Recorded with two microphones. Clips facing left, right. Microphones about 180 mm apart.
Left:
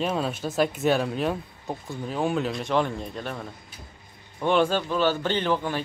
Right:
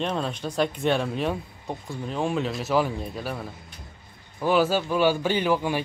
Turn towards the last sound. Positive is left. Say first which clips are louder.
# right 2 dB
turn(degrees=-10)  # may be behind; listen again after turning